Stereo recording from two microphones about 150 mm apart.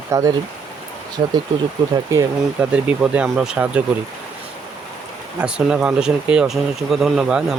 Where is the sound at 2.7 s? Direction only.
10° right (ahead or behind).